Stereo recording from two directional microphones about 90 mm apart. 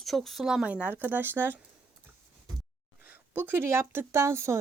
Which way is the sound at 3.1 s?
20° right (ahead or behind).